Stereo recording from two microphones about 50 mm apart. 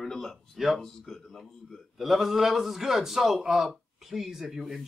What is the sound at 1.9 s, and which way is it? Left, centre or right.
A man's voice, centre.